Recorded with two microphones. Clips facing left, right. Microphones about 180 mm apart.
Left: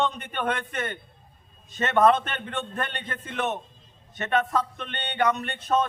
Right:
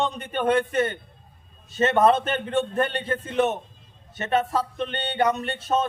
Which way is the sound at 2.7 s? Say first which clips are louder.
Right 8 dB; 30° right (ahead or behind).